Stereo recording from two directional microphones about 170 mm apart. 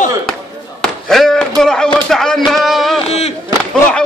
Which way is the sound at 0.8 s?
Centre (ahead or behind).